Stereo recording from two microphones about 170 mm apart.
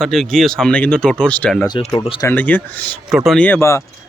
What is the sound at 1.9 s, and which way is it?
Speech, 30° left (ahead or behind).